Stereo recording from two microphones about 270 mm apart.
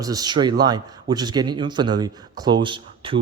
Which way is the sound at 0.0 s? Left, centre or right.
Centre.